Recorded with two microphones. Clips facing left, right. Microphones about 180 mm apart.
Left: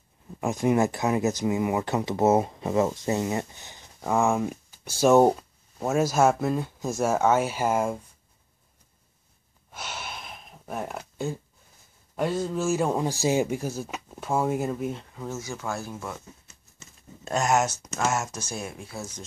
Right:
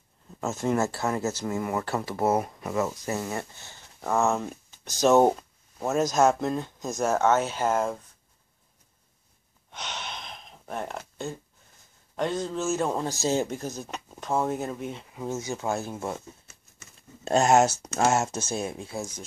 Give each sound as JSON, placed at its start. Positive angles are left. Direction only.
{"t": 0.4, "sound": "speech", "side_deg": 15}
{"t": 9.7, "sound": "gasp", "side_deg": 5}
{"t": 12.2, "sound": "speech", "side_deg": 5}
{"t": 15.1, "sound": "speech", "side_deg": -20}
{"t": 17.2, "sound": "speech", "side_deg": -30}